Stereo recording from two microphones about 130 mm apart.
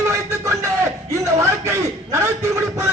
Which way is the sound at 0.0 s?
25° right (ahead or behind).